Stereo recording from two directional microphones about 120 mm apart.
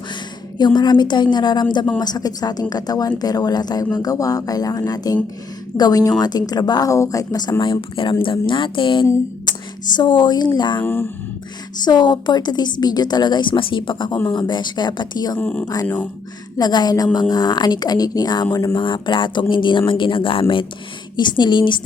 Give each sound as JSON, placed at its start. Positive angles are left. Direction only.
{"t": 0.6, "sound": "speech", "side_deg": 35}
{"t": 7.6, "sound": "speech", "side_deg": 45}
{"t": 10.8, "sound": "speech", "side_deg": 15}
{"t": 11.9, "sound": "speech", "side_deg": 35}
{"t": 15.4, "sound": "speech", "side_deg": 10}
{"t": 15.6, "sound": "speech", "side_deg": 30}